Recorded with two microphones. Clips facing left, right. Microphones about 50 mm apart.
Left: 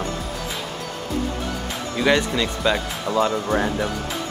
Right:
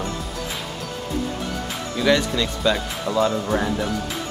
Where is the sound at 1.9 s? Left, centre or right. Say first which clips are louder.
Even; centre.